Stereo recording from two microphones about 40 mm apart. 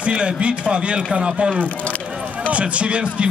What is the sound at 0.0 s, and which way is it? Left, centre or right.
A man's voice, right.